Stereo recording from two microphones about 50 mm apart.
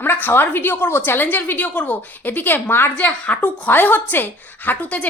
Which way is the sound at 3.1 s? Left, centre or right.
Left.